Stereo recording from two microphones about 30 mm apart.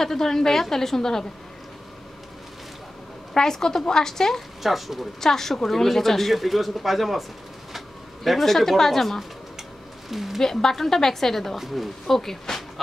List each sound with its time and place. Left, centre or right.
0.0 s a woman's voice: centre
3.3 s a woman's voice: centre
4.6 s speech: centre
5.2 s speech: centre
10.0 s speech: centre
10.4 s a woman's voice: centre
11.5 s speech: centre